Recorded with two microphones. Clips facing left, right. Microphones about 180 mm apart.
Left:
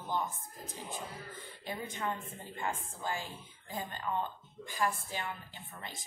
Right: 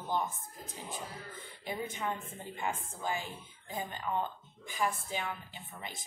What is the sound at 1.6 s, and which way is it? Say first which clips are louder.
Speech: right 1 dB; 15° right (ahead or behind).